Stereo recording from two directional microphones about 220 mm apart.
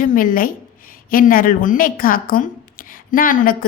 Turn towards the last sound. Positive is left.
turn(degrees=40)  # may be behind; listen again after turning